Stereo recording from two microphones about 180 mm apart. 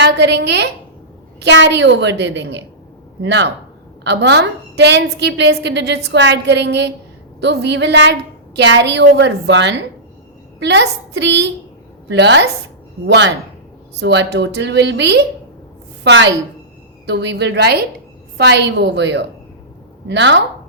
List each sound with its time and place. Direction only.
0.0 s a woman's voice: 70° right (ahead or behind)
16.0 s a woman's voice: 80° right